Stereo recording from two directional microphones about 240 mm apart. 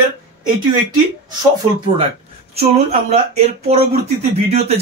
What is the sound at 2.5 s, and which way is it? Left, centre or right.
Speech, right.